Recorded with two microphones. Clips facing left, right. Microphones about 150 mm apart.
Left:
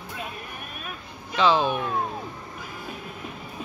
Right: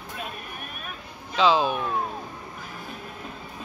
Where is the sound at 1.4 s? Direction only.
Centre (ahead or behind).